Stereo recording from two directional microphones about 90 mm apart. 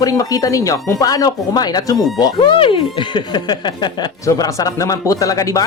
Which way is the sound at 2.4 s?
70° left (ahead or behind).